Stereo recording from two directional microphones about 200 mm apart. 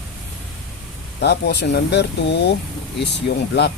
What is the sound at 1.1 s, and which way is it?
Speech, 55° left (ahead or behind).